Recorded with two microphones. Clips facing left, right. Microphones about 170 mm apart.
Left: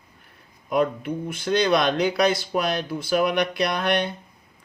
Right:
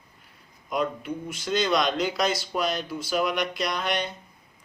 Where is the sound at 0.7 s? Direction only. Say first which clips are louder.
Left 5 dB; 55° left (ahead or behind).